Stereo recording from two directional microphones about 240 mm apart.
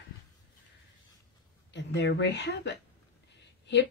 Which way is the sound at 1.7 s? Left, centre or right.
Left.